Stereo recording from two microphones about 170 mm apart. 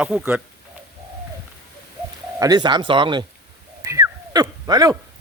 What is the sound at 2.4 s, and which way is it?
Speech, 25° right (ahead or behind).